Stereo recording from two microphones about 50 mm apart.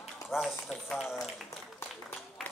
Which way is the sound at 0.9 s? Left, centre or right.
Centre.